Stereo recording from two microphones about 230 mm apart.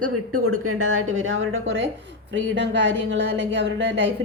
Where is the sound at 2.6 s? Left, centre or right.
Right.